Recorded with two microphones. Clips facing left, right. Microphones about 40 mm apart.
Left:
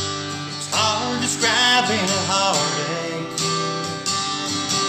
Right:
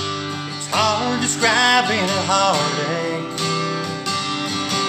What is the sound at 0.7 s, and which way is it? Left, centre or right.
Music, centre.